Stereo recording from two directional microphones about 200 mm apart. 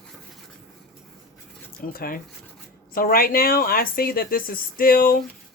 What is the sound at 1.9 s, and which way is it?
Speech, 45° left (ahead or behind).